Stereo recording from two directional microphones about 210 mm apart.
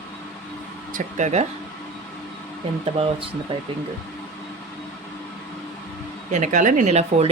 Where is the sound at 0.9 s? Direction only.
35° right (ahead or behind).